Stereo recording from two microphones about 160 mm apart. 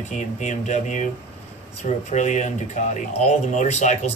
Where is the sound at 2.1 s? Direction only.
50° left (ahead or behind).